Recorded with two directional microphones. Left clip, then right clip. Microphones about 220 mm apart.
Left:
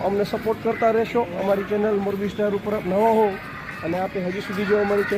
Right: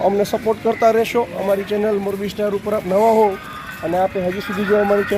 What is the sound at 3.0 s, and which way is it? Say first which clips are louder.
Speech: right 4 dB; 45° right (ahead or behind).